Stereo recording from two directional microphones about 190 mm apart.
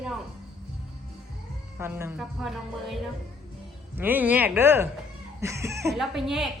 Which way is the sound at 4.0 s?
10° right (ahead or behind).